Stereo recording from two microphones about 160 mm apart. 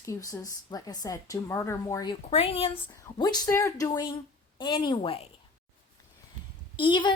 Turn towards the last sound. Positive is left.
turn(degrees=30)  # may be behind; listen again after turning